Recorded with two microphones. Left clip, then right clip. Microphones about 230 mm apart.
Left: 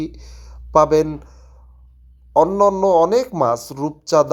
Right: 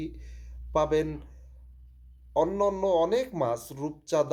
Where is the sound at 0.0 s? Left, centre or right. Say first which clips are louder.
Left 10 dB; left.